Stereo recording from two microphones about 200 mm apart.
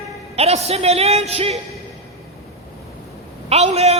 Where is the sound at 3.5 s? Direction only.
30° right (ahead or behind).